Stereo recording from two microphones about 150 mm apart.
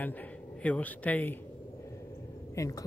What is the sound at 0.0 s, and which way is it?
Speech, 10° left (ahead or behind).